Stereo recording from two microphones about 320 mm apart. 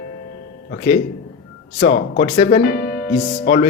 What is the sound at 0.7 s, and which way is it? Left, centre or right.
A man's voice, left.